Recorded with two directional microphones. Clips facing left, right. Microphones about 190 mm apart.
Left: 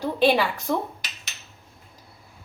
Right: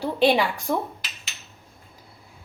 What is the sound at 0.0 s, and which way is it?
Speech, 15° right (ahead or behind).